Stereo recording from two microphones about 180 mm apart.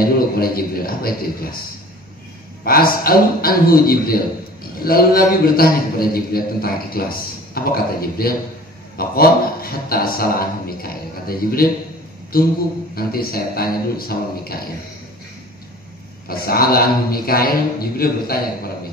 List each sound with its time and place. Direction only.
0.0 s a man's voice: 55° left (ahead or behind)
2.6 s a man's voice: 55° left (ahead or behind)
12.9 s a man's voice: 55° left (ahead or behind)
16.3 s a man's voice: 55° left (ahead or behind)